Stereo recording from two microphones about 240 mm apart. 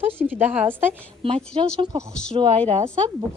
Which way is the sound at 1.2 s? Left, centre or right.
Right.